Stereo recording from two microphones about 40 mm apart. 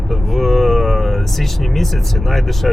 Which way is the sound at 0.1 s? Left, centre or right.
Centre.